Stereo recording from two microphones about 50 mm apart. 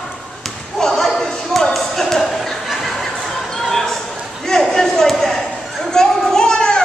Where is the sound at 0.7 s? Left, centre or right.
Centre.